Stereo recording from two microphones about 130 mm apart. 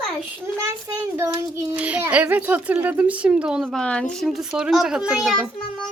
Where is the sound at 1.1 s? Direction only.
25° right (ahead or behind).